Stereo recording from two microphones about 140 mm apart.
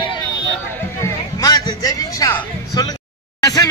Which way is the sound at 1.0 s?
25° left (ahead or behind).